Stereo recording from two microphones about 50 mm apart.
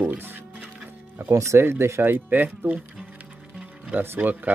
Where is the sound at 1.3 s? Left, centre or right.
Right.